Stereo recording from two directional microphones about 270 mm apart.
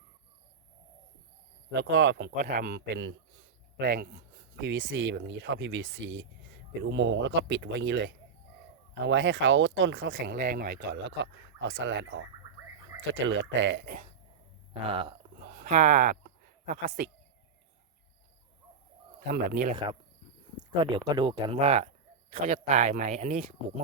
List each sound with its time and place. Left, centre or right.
1.7 s speech: right
10.3 s speech: right
14.7 s speech: centre
15.4 s speech: right
19.3 s speech: right
19.7 s speech: centre